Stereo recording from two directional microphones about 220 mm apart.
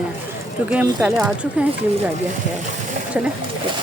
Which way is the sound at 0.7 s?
5° right (ahead or behind).